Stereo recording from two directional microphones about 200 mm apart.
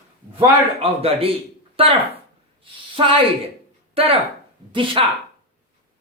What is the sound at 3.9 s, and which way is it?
Speech, 30° right (ahead or behind).